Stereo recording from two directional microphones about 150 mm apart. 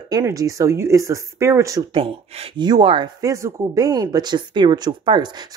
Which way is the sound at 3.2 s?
20° right (ahead or behind).